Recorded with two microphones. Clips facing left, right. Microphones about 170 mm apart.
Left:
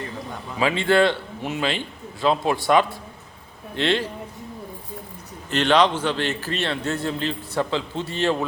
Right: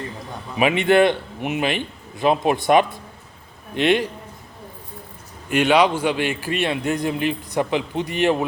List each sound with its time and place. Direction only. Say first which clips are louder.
0.5 s a man's voice: right 3 dB; 20° right (ahead or behind)
5.5 s a man's voice: right 2 dB; 10° right (ahead or behind)